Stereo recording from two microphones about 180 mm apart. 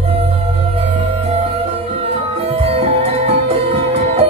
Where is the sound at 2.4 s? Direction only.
35° right (ahead or behind).